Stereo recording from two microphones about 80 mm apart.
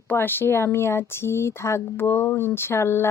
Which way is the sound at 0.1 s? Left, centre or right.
Left.